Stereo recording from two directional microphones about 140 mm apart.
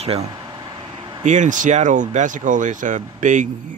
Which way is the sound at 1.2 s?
65° right (ahead or behind).